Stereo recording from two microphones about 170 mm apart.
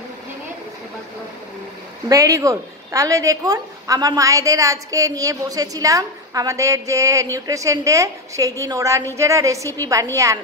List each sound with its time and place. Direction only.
2.0 s speech: 20° right (ahead or behind)